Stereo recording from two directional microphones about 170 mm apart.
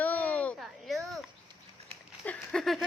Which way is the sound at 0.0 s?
10° left (ahead or behind).